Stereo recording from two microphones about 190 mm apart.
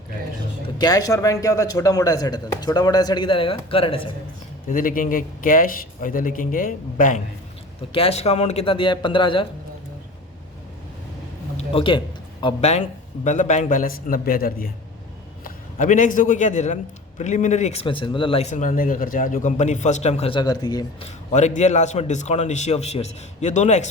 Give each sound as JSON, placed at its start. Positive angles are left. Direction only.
{"t": 0.8, "sound": "speech", "side_deg": 20}
{"t": 4.7, "sound": "speech", "side_deg": 45}
{"t": 7.9, "sound": "speech", "side_deg": 30}
{"t": 11.5, "sound": "a man's voice", "side_deg": 30}
{"t": 18.5, "sound": "speech", "side_deg": 45}
{"t": 21.3, "sound": "speech", "side_deg": 35}